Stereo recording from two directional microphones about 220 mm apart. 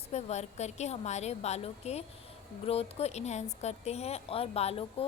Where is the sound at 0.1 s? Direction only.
30° left (ahead or behind).